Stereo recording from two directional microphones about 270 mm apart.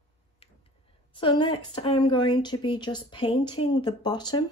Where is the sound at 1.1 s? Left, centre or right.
Centre.